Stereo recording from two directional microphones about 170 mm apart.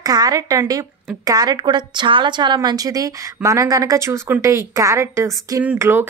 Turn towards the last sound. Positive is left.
turn(degrees=-15)  # may be behind; listen again after turning